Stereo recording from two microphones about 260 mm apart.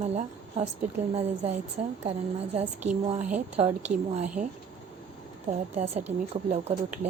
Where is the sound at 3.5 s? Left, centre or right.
Right.